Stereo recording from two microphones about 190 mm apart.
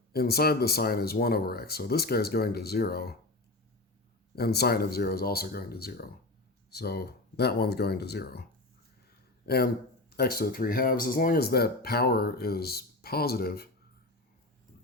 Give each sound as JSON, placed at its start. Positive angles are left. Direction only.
{"t": 0.1, "sound": "speech", "side_deg": 55}
{"t": 4.4, "sound": "speech", "side_deg": 55}
{"t": 9.5, "sound": "speech", "side_deg": 55}